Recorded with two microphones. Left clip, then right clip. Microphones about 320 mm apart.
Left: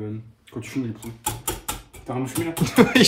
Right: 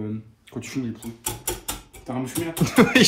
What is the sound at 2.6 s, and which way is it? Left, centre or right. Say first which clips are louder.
Speech: even; centre.